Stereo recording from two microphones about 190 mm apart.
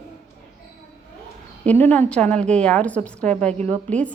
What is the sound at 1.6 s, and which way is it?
A woman's voice, 10° left (ahead or behind).